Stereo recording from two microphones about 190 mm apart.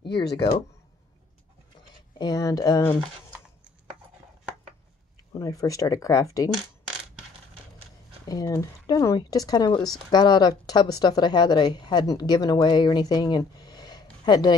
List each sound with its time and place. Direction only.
0.0 s speech: 25° left (ahead or behind)
2.1 s speech: 20° left (ahead or behind)
5.4 s speech: 20° left (ahead or behind)
8.3 s speech: 20° left (ahead or behind)